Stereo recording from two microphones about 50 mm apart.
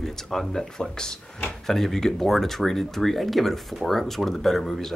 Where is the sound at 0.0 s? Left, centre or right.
Centre.